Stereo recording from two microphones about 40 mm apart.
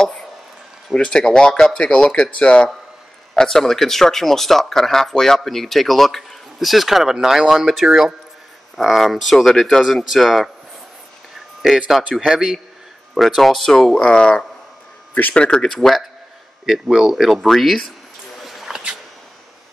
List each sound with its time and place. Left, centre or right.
0.0 s a sound: centre
0.9 s speech: centre
3.3 s speech: centre
9.5 s speech: centre
12.1 s speech: centre
13.2 s speech: centre
14.0 s speech: left
15.7 s speech: centre
16.6 s speech: centre
18.4 s a sound: centre